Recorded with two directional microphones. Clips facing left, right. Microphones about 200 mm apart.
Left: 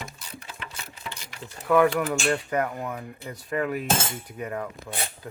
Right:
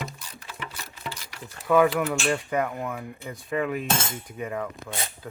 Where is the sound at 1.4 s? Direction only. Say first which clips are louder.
Even; 5° right (ahead or behind).